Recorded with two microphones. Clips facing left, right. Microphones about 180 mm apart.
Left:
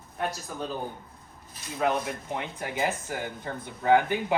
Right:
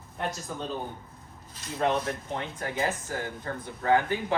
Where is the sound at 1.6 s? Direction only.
10° left (ahead or behind).